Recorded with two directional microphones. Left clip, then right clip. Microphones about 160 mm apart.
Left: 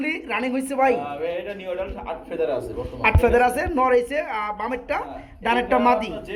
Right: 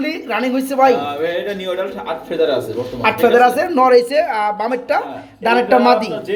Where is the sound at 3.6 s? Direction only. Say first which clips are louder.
Right 8 dB; 5° right (ahead or behind).